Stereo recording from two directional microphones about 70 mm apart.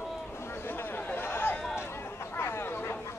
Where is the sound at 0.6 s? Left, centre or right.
Left.